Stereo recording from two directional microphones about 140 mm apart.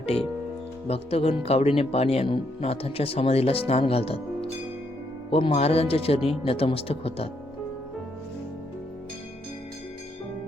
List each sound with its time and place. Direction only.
0.9 s speech: 45° left (ahead or behind)